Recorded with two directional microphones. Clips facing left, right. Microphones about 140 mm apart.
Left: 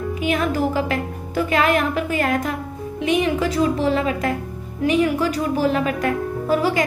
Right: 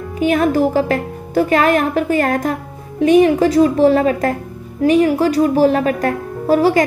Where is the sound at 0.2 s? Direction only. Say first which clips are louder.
Right 8 dB; 40° right (ahead or behind).